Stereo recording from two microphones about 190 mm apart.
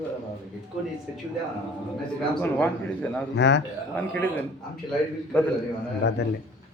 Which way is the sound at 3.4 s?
65° left (ahead or behind).